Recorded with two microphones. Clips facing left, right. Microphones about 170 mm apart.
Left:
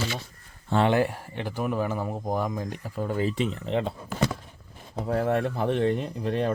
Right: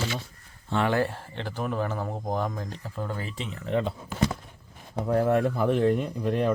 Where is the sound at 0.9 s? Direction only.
15° left (ahead or behind).